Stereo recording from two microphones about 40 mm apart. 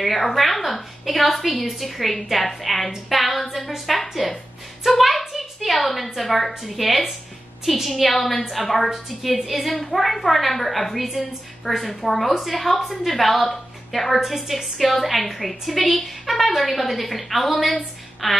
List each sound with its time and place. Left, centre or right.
0.0 s a woman's voice: centre